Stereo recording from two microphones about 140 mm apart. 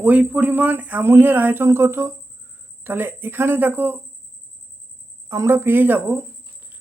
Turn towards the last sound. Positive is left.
turn(degrees=-15)  # may be behind; listen again after turning